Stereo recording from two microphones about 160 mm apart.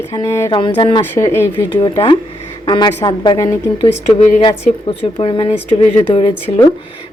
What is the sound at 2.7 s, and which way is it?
A woman's voice, 25° left (ahead or behind).